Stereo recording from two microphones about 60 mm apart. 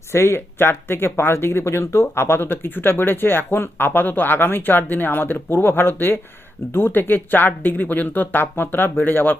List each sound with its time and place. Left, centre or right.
0.1 s speech: left